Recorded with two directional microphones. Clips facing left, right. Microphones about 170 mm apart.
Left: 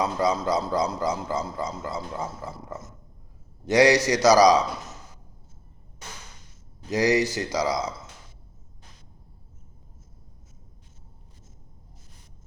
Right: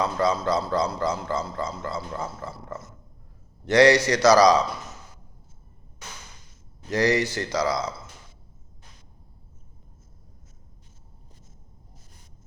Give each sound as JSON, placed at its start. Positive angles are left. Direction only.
{"t": 0.0, "sound": "speech", "side_deg": 15}
{"t": 6.9, "sound": "speech", "side_deg": 15}